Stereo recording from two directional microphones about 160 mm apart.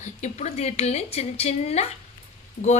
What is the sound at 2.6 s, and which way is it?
Speech, 60° left (ahead or behind).